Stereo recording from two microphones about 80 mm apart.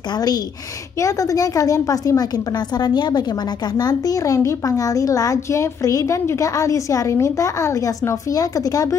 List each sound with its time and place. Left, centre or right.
0.1 s a woman's voice: left
0.9 s a woman's voice: left